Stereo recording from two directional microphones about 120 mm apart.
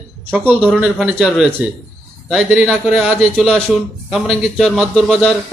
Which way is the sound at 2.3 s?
Centre (ahead or behind).